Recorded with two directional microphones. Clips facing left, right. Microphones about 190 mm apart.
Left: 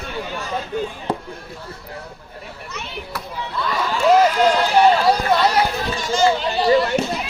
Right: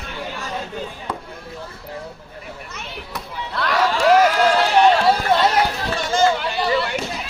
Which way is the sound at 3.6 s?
85° right.